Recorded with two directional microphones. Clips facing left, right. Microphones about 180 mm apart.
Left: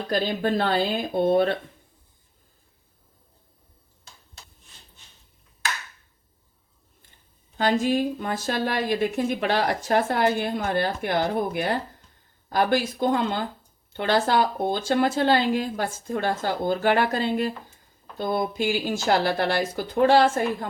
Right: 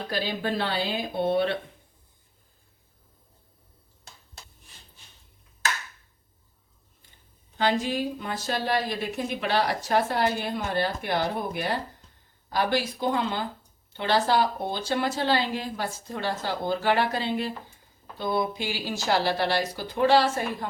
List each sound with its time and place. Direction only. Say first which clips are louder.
0.1 s a woman's voice: left 5 dB; 45° left (ahead or behind)
7.6 s a woman's voice: left 4 dB; 45° left (ahead or behind)